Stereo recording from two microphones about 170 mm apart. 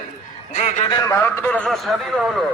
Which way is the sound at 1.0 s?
15° left (ahead or behind).